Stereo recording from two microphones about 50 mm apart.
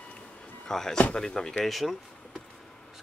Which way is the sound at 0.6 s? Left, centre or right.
Centre.